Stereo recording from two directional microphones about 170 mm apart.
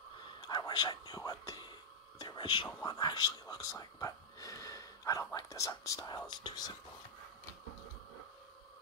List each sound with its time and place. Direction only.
0.4 s speech: 25° left (ahead or behind)